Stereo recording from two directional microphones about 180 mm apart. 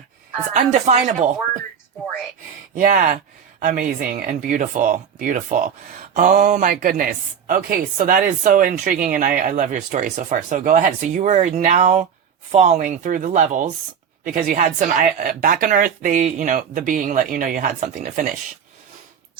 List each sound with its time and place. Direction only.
0.5 s speech: 40° right (ahead or behind)
2.7 s speech: 50° right (ahead or behind)